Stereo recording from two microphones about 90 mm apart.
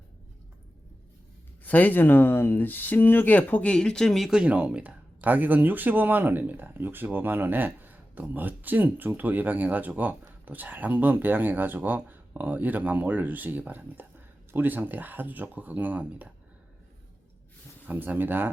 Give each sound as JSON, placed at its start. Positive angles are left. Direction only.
{"t": 1.6, "sound": "speech", "side_deg": 20}
{"t": 4.3, "sound": "speech", "side_deg": -10}
{"t": 17.8, "sound": "speech", "side_deg": -20}